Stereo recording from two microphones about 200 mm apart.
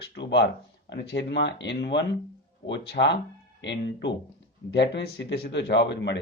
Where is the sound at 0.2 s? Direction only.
60° left (ahead or behind).